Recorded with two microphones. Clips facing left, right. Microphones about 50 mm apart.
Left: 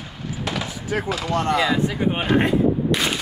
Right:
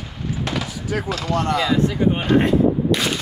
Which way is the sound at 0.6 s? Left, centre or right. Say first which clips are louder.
Even; left.